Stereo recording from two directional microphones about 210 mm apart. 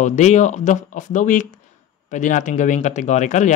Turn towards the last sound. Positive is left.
turn(degrees=35)  # may be behind; listen again after turning